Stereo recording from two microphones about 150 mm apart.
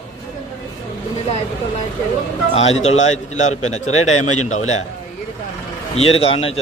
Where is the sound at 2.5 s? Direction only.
45° left (ahead or behind).